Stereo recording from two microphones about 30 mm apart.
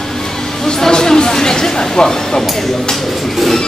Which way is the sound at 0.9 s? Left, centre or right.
Left.